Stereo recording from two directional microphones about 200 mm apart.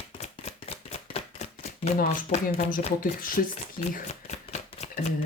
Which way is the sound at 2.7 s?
45° left (ahead or behind).